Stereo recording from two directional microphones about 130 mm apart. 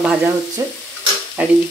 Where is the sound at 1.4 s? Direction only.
15° right (ahead or behind).